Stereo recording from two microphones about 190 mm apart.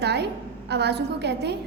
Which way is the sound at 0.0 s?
60° right (ahead or behind).